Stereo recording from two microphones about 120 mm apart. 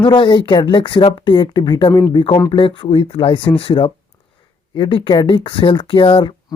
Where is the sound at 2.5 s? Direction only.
45° left (ahead or behind).